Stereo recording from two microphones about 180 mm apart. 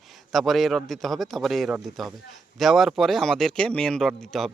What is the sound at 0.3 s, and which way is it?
Speech, centre (ahead or behind).